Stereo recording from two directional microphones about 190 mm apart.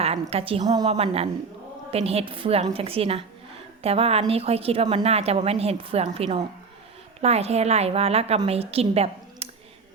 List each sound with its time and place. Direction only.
0.0 s a woman's voice: 30° right (ahead or behind)
0.9 s a woman's voice: 35° right (ahead or behind)